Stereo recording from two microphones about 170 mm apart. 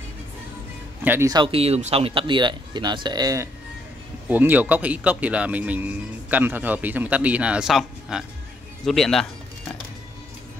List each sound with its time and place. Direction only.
1.0 s speech: 10° right (ahead or behind)
1.3 s speech: 30° right (ahead or behind)
4.3 s speech: 10° right (ahead or behind)